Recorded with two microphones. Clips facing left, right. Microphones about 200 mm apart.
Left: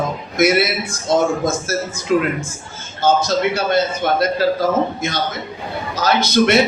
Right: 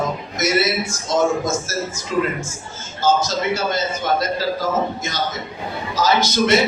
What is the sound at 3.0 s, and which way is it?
Speech, 60° left (ahead or behind).